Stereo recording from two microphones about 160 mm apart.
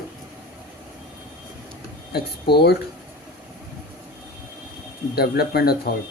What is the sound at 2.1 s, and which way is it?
Speech, 90° left.